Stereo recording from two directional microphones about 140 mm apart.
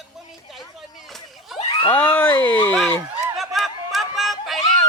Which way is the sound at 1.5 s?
40° left (ahead or behind).